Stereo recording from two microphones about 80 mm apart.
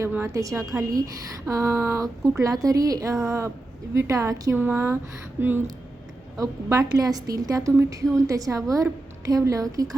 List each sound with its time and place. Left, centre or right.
0.3 s a woman's voice: right
4.5 s speech: right
6.3 s a woman's voice: right
6.8 s speech: right